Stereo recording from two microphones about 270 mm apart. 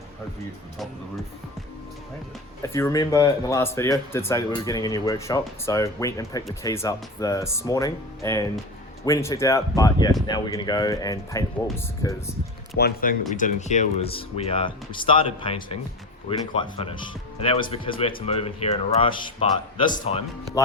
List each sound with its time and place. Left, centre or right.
2.7 s speech: centre
12.7 s speech: left; by 20.2 s centre